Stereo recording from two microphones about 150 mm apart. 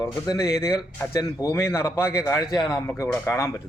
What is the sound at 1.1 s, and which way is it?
A man's voice, 20° left (ahead or behind).